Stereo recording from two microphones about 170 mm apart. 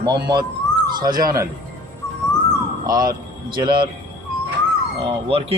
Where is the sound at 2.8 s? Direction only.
20° right (ahead or behind).